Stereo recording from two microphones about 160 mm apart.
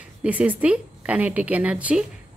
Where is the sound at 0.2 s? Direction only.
10° right (ahead or behind).